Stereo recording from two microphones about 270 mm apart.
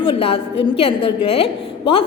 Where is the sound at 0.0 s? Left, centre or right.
Left.